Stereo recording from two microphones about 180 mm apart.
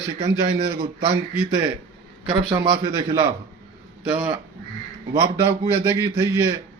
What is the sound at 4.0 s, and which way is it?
Speech, 10° right (ahead or behind).